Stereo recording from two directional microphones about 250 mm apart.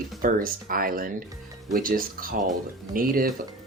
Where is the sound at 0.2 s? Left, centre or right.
Right.